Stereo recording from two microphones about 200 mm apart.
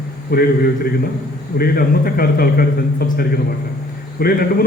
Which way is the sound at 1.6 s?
50° left (ahead or behind).